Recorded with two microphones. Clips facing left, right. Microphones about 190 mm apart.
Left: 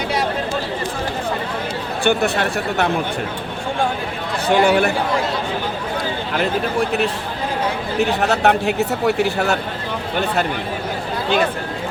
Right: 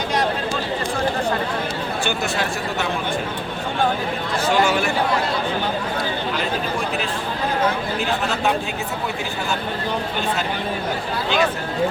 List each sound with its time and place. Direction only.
2.0 s speech: 60° left (ahead or behind)
4.4 s speech: 60° left (ahead or behind)
7.9 s speech: 70° left (ahead or behind)